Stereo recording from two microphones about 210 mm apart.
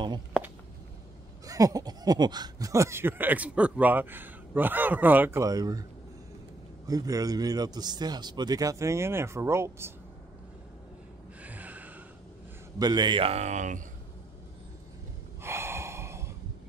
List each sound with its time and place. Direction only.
1.4 s speech: 15° right (ahead or behind)
6.9 s speech: 15° right (ahead or behind)
11.4 s gasp: 5° right (ahead or behind)
12.7 s a man's voice: 20° right (ahead or behind); by 13.8 s 35° right (ahead or behind)
15.4 s gasp: 10° right (ahead or behind)